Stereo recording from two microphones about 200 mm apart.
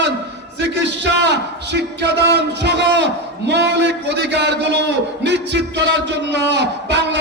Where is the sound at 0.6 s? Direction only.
60° right (ahead or behind).